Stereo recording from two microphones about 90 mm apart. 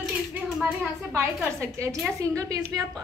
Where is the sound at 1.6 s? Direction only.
35° right (ahead or behind).